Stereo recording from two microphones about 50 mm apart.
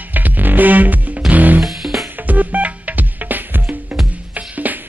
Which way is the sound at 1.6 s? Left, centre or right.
Centre.